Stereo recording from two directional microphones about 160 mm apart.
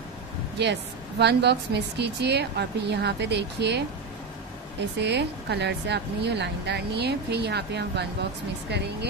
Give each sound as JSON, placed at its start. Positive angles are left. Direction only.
{"t": 1.2, "sound": "a woman's voice", "side_deg": -90}
{"t": 5.0, "sound": "a woman's voice", "side_deg": -90}